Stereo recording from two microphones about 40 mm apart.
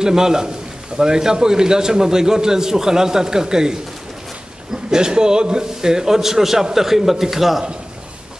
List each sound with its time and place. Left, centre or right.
0.0 s a man's voice: centre
4.9 s a man's voice: centre